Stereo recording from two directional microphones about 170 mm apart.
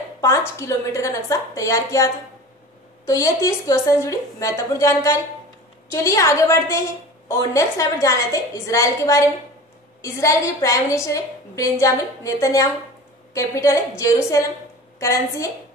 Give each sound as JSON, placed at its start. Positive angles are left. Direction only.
{"t": 0.6, "sound": "a woman's voice", "side_deg": 20}
{"t": 3.1, "sound": "a woman's voice", "side_deg": 20}